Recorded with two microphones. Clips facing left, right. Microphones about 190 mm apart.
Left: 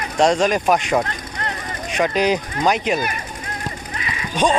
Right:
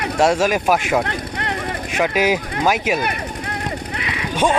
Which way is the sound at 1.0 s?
65° right (ahead or behind).